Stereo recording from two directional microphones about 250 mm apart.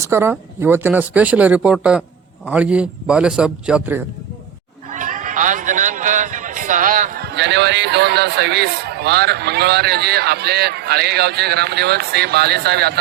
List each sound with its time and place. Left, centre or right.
0.0 s speech: centre
4.9 s speech: right